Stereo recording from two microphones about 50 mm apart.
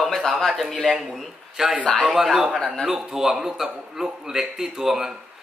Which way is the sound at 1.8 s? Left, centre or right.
Left.